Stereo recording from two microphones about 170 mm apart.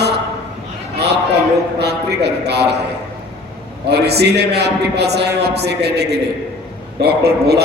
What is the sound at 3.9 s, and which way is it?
A man's voice, 75° right (ahead or behind).